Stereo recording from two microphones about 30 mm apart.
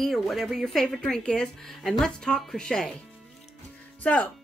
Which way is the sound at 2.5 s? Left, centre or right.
Left.